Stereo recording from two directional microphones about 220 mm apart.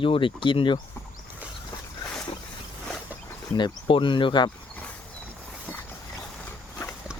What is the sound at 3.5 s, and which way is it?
Speech, 20° left (ahead or behind).